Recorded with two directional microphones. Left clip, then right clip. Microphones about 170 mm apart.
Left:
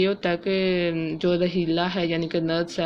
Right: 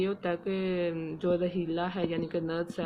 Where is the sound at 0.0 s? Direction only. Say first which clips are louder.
Left 8 dB; 25° left (ahead or behind).